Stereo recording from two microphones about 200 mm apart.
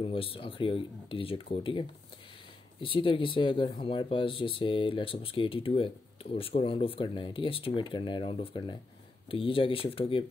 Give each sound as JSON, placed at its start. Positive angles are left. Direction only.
{"t": 0.0, "sound": "speech", "side_deg": 25}